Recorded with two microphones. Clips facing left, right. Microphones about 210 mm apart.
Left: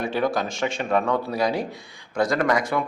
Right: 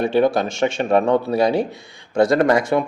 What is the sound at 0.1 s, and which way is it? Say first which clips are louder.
Speech: right 7 dB; 25° right (ahead or behind).